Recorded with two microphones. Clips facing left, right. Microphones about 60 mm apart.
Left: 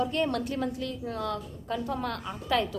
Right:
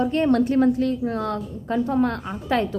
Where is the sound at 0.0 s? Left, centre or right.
Right.